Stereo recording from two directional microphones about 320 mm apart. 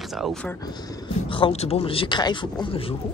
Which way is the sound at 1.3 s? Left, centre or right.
Centre.